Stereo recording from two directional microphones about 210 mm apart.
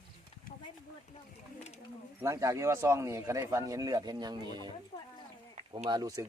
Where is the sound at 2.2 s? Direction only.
15° right (ahead or behind).